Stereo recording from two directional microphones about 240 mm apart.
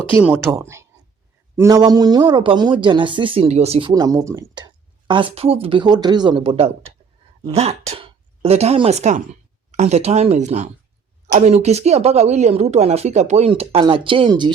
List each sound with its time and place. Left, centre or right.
0.2 s speech: centre